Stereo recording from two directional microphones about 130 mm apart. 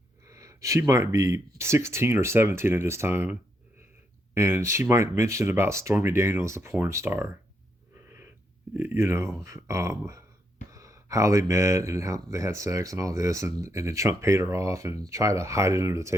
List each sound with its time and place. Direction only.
0.3 s speech: 25° right (ahead or behind)
4.4 s speech: 20° right (ahead or behind)
8.7 s speech: 15° right (ahead or behind)